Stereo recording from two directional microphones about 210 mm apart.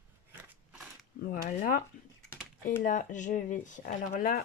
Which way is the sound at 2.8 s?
35° left (ahead or behind).